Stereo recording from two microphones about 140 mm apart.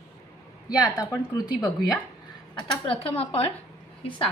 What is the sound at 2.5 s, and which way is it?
Dishes, 40° left (ahead or behind).